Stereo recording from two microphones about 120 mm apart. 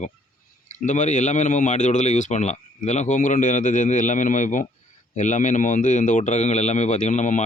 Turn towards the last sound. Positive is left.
turn(degrees=85)